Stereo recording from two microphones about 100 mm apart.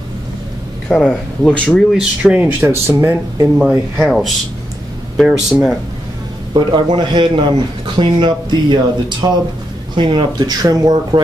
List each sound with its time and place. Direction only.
0.8 s speech: 10° left (ahead or behind)
1.7 s speech: centre (ahead or behind)
2.6 s speech: 25° right (ahead or behind)
3.5 s speech: 10° right (ahead or behind)
6.5 s a man's voice: 50° right (ahead or behind)